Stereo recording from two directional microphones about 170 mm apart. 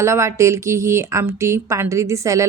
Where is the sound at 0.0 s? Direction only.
15° right (ahead or behind).